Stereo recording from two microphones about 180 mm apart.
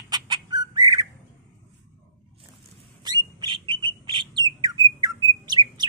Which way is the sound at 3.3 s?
25° right (ahead or behind).